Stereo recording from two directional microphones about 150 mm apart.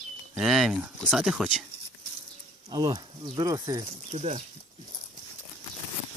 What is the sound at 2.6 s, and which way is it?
Speech, 25° right (ahead or behind).